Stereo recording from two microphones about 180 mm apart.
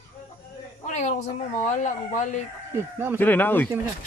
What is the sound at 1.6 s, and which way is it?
Speech, 45° left (ahead or behind).